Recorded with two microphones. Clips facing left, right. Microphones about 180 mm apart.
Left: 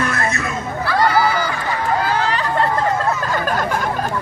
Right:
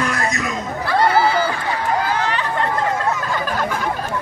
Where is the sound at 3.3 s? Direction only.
45° left (ahead or behind).